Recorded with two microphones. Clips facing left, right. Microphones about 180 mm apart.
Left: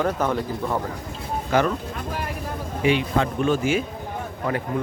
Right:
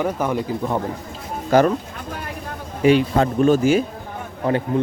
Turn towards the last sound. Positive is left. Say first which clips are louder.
# right 4 dB
turn(degrees=-30)  # may be behind; listen again after turning